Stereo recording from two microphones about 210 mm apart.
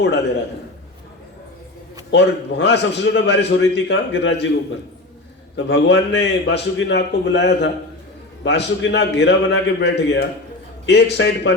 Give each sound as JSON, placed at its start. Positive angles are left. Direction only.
{"t": 2.0, "sound": "a man's voice", "side_deg": 55}
{"t": 5.5, "sound": "a man's voice", "side_deg": 55}